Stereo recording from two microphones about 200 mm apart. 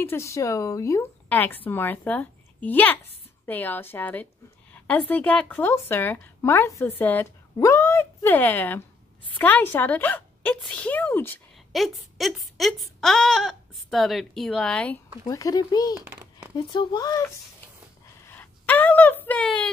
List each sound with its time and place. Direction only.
0.0 s speech: 15° left (ahead or behind)
11.7 s speech: centre (ahead or behind)
15.2 s speech: 20° left (ahead or behind)
15.9 s a sound: 10° right (ahead or behind)
16.5 s speech: 20° left (ahead or behind)
18.3 s a sound: 10° left (ahead or behind)